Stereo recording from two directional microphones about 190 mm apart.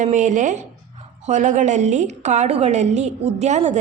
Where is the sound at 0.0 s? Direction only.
40° right (ahead or behind).